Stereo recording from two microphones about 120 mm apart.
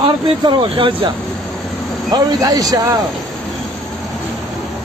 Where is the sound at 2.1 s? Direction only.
35° right (ahead or behind).